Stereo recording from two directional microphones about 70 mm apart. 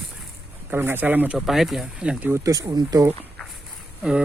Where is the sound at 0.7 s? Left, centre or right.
Right.